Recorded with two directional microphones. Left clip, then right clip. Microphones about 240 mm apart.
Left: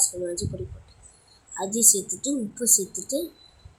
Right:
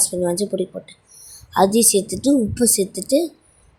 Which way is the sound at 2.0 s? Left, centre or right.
Centre.